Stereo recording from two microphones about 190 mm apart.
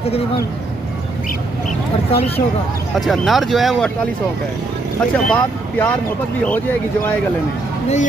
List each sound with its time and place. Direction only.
2.0 s speech: 30° left (ahead or behind)
3.0 s speech: centre (ahead or behind)
5.1 s speech: 10° left (ahead or behind)